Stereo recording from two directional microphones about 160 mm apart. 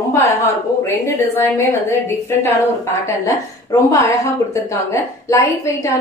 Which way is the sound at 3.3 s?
20° left (ahead or behind).